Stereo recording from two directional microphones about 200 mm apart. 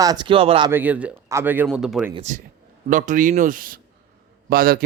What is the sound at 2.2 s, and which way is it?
A man's voice, 35° right (ahead or behind).